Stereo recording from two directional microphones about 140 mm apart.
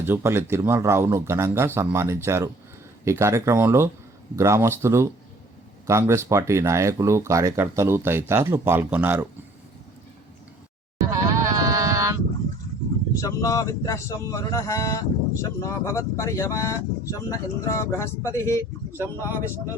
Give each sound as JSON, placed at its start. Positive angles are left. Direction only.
{"t": 0.0, "sound": "speech", "side_deg": -15}
{"t": 11.1, "sound": "sheep", "side_deg": -25}
{"t": 13.1, "sound": "speech", "side_deg": 25}